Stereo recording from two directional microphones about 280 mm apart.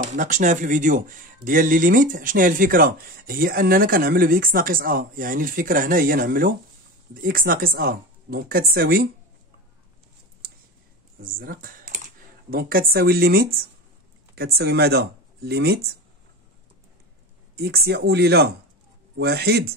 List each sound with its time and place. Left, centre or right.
0.0 s speech: right
11.1 s speech: right
17.6 s speech: right